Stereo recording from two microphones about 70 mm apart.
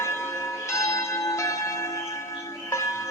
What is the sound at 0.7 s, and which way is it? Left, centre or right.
Church bell, left.